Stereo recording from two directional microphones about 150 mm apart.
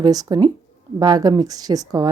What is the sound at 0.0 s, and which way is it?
Speech, 25° right (ahead or behind).